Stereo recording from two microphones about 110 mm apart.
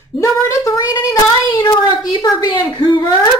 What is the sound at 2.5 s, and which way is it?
Speech, 40° left (ahead or behind).